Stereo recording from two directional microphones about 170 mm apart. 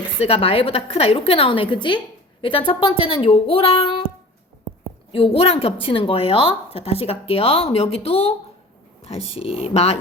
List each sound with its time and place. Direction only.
0.2 s a woman's voice: 35° left (ahead or behind)
5.1 s a woman's voice: 35° left (ahead or behind)